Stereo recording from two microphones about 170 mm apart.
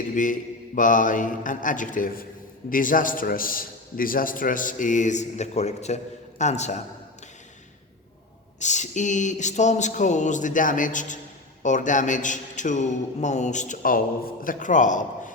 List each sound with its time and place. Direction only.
0.1 s a man's voice: 50° left (ahead or behind)
8.5 s a man's voice: 45° left (ahead or behind)